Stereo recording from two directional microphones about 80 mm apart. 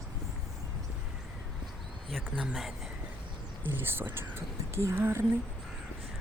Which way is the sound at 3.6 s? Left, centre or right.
Right.